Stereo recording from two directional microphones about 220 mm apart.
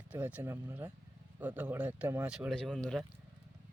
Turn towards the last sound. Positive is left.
turn(degrees=0)  # may be behind; listen again after turning